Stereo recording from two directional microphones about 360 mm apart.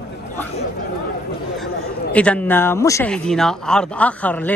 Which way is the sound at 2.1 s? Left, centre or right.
Centre.